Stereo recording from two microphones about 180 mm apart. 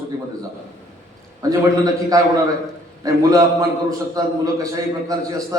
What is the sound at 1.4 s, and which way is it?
A man's voice, 20° right (ahead or behind).